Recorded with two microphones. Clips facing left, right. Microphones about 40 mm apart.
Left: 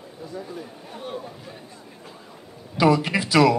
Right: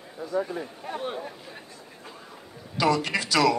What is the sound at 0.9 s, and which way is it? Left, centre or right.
Speech, right.